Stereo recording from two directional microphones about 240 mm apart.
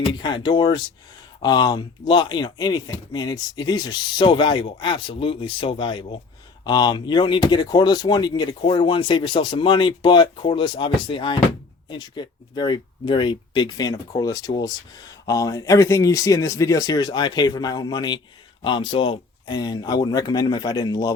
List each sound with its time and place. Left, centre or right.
0.0 s speech: centre